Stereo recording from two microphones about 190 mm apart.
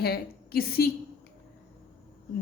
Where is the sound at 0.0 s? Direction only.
55° left (ahead or behind).